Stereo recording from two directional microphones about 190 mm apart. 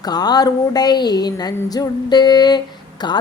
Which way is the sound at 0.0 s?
20° left (ahead or behind).